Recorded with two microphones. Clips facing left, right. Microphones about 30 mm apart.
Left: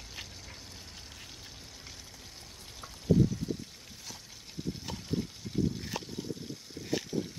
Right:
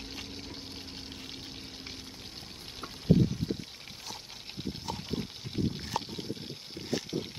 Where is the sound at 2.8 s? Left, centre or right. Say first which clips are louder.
Right 1 dB; right.